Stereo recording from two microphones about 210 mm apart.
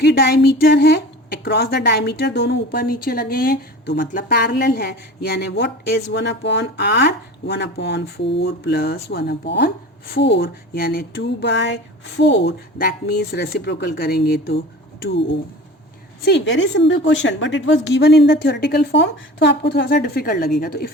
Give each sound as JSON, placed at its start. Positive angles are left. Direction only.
{"t": 0.0, "sound": "speech", "side_deg": 50}
{"t": 16.2, "sound": "speech", "side_deg": 55}